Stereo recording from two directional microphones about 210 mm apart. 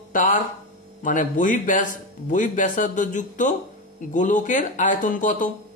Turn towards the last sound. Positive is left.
turn(degrees=35)  # may be behind; listen again after turning